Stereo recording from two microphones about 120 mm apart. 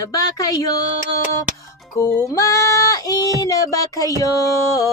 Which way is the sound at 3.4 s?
30° left (ahead or behind).